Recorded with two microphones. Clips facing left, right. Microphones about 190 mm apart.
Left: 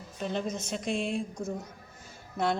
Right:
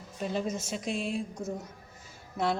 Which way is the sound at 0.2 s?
5° right (ahead or behind).